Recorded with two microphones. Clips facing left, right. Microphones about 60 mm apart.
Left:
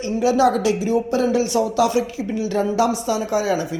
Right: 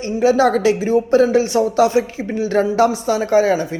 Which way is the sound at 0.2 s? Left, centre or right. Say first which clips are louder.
Right 3 dB; right.